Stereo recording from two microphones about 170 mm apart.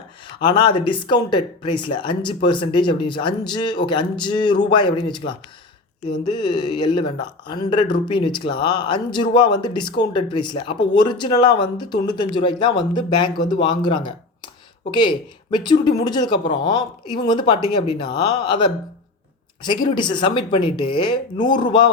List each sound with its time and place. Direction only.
0.4 s speech: 30° left (ahead or behind)